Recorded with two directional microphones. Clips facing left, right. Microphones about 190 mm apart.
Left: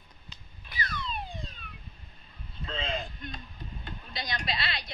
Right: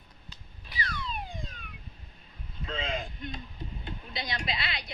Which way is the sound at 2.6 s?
10° right (ahead or behind).